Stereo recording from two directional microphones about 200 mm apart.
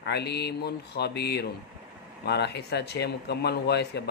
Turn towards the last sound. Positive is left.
turn(degrees=55)  # may be behind; listen again after turning